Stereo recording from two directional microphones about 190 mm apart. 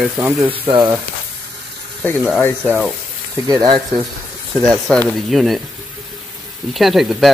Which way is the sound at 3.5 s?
20° right (ahead or behind).